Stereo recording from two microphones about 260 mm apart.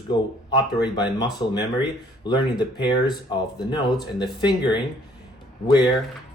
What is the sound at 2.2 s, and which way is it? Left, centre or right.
A man's voice, centre.